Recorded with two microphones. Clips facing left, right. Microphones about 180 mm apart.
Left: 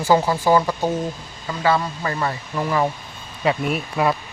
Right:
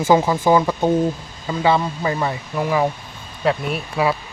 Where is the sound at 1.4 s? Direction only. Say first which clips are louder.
Right 2 dB; 15° right (ahead or behind); by 4.2 s centre (ahead or behind).